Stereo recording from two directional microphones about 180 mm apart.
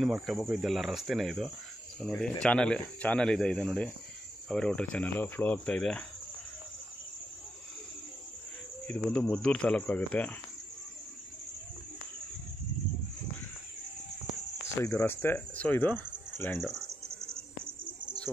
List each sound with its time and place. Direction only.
0.0 s speech: centre (ahead or behind)
8.8 s speech: 5° left (ahead or behind)
14.9 s speech: 10° left (ahead or behind)
17.1 s bird: 15° right (ahead or behind)